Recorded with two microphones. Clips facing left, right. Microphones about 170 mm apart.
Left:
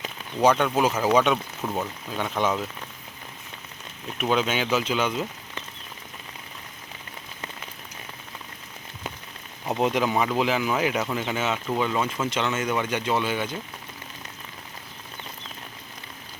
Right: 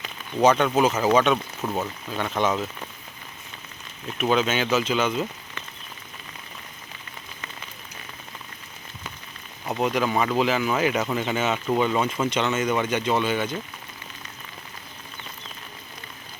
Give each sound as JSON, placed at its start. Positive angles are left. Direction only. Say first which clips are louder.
{"t": 0.4, "sound": "speech", "louder": "right 2 dB", "side_deg": 5}
{"t": 1.6, "sound": "speech", "louder": "right 1 dB", "side_deg": -5}
{"t": 2.1, "sound": "speech", "louder": "right 1 dB", "side_deg": 10}
{"t": 4.4, "sound": "speech", "louder": "right 2 dB", "side_deg": 10}
{"t": 9.6, "sound": "speech", "louder": "left 1 dB", "side_deg": 20}
{"t": 10.0, "sound": "speech", "louder": "right 1 dB", "side_deg": 5}
{"t": 12.3, "sound": "speech", "louder": "right 2 dB", "side_deg": 5}